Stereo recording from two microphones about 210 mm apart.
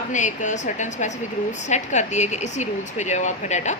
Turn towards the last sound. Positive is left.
turn(degrees=35)  # may be behind; listen again after turning